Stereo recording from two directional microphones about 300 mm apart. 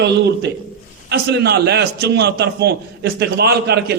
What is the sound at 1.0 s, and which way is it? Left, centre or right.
A man's voice, right.